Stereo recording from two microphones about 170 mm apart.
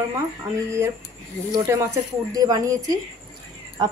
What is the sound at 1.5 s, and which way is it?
A woman's voice, 15° right (ahead or behind).